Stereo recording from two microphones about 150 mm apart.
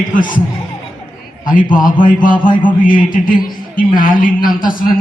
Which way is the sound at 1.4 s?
65° left (ahead or behind).